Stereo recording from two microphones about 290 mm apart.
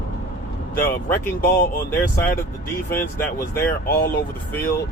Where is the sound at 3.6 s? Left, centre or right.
Left.